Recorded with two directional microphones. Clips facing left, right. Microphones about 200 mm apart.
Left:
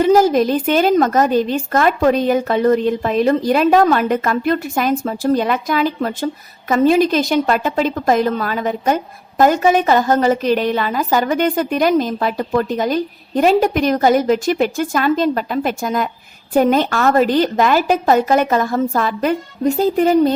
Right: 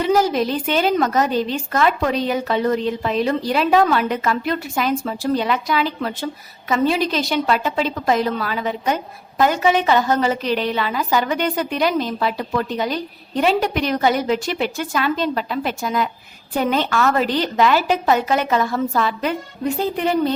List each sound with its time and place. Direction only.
0.0 s a woman's voice: 45° left (ahead or behind)